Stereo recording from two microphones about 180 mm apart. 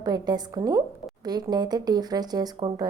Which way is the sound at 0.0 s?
20° right (ahead or behind).